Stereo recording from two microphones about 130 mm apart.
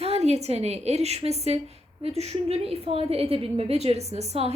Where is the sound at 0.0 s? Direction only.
55° right (ahead or behind).